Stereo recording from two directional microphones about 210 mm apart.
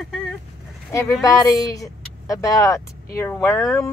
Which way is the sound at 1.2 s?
15° left (ahead or behind).